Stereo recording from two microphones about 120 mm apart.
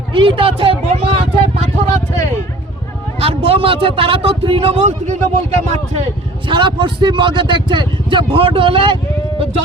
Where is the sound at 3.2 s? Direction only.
55° right (ahead or behind); by 5.2 s 75° right (ahead or behind).